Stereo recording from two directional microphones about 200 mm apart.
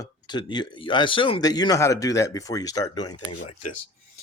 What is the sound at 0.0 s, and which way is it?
Speech, 20° left (ahead or behind).